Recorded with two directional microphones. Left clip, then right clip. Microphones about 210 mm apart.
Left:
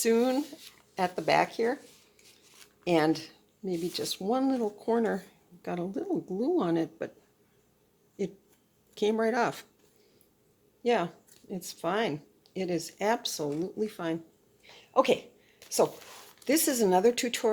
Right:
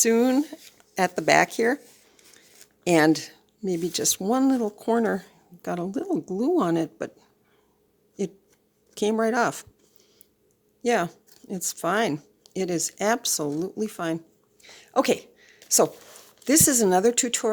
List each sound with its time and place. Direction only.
0.0 s speech: 35° right (ahead or behind)
2.8 s speech: 40° right (ahead or behind)
8.2 s speech: 30° right (ahead or behind)
10.8 s speech: 40° right (ahead or behind)
14.6 s a sound: 45° right (ahead or behind)
16.4 s speech: 35° right (ahead or behind)